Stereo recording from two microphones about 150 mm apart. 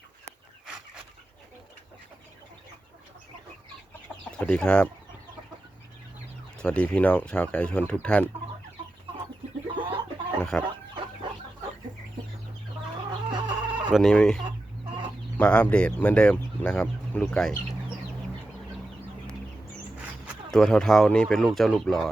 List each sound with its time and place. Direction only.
4.3 s speech: 5° left (ahead or behind)
6.6 s speech: 5° left (ahead or behind)
9.7 s chicken: 35° right (ahead or behind)
10.5 s speech: 5° left (ahead or behind)
13.1 s chicken: 30° right (ahead or behind)
13.9 s speech: 5° left (ahead or behind)
20.5 s speech: 5° left (ahead or behind)